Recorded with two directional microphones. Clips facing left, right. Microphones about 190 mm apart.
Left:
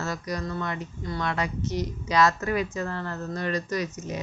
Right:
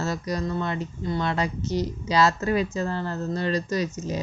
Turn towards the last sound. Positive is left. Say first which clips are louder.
# right 3 dB
turn(degrees=-30)  # may be behind; listen again after turning